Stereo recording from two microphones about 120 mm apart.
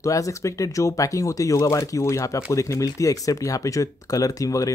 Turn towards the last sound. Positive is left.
turn(degrees=30)  # may be behind; listen again after turning